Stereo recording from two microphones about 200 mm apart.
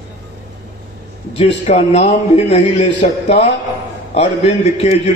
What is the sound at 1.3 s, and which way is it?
A man's voice, 30° left (ahead or behind).